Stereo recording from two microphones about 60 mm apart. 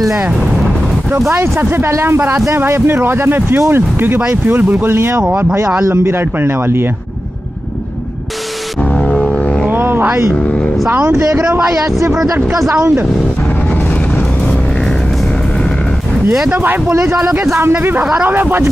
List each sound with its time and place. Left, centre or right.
1.3 s speech: right
8.9 s a sound: centre
9.7 s a sound: right
10.3 s vehicle: centre
12.5 s speech: centre
16.4 s speech: right
16.9 s speech: right
17.3 s speech: right
18.2 s speech: right